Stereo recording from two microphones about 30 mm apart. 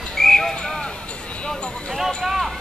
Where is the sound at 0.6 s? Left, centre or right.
Left.